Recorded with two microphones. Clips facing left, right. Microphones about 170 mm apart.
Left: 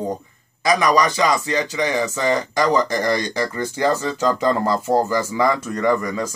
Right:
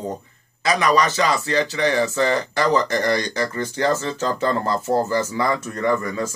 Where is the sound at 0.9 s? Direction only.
15° left (ahead or behind).